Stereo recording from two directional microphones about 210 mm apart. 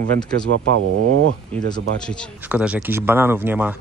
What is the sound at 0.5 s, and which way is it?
Speech, 80° right.